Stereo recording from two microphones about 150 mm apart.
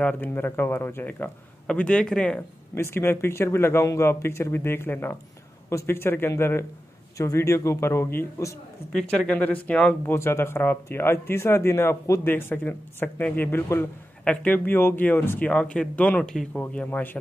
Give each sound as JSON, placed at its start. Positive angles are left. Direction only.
{"t": 0.0, "sound": "a man's voice", "side_deg": 10}
{"t": 8.9, "sound": "speech", "side_deg": 5}